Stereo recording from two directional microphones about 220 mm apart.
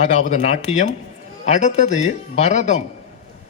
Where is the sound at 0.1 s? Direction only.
35° left (ahead or behind).